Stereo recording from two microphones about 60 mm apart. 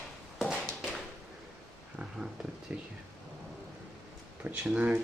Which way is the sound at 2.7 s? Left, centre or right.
Right.